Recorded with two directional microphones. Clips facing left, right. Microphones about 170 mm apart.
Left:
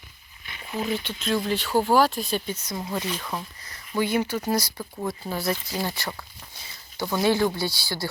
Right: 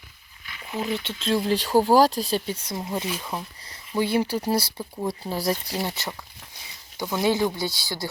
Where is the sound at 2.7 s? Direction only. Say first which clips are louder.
Even; 10° right (ahead or behind).